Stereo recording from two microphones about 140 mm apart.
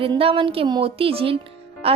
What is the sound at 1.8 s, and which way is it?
Music, 45° right (ahead or behind).